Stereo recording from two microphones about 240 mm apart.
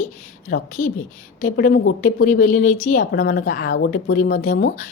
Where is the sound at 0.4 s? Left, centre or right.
Left.